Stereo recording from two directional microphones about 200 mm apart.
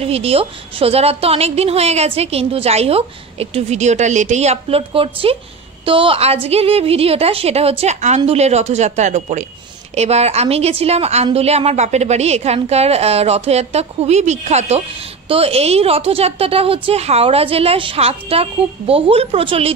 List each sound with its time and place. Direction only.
0.0 s a woman's voice: 30° right (ahead or behind)